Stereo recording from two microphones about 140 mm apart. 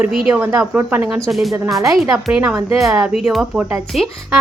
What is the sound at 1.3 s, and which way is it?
Speech, centre (ahead or behind).